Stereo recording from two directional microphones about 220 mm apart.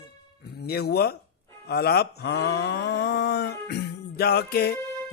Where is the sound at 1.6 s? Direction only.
45° left (ahead or behind).